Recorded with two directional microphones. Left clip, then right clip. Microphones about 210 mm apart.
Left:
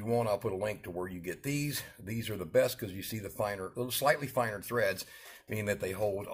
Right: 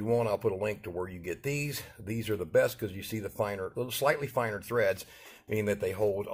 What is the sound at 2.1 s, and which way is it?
Speech, 30° right (ahead or behind).